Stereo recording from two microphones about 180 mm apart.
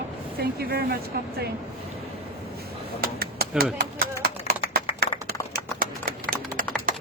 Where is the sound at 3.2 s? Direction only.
60° right (ahead or behind).